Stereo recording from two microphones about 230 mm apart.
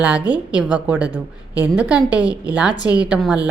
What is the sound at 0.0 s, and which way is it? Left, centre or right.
A woman's voice, centre.